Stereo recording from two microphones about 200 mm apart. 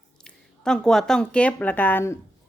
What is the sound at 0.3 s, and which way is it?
Speech, 5° left (ahead or behind).